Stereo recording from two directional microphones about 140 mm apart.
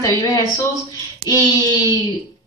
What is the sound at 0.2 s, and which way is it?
A woman's voice, 25° left (ahead or behind).